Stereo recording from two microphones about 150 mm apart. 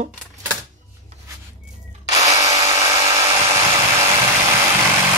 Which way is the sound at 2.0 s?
25° right (ahead or behind).